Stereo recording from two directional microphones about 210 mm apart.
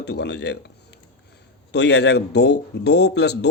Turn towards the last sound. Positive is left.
turn(degrees=55)  # may be behind; listen again after turning